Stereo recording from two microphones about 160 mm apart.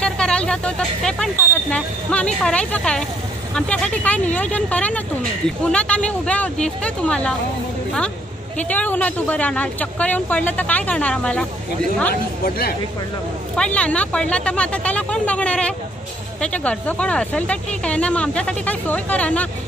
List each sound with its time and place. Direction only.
0.0 s speech: 5° left (ahead or behind)
8.5 s speech: 10° left (ahead or behind)
12.1 s speech: 70° left (ahead or behind)
13.6 s speech: 5° left (ahead or behind)